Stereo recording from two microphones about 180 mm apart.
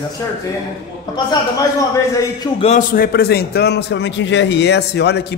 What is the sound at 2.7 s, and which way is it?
A man's voice, 55° left (ahead or behind).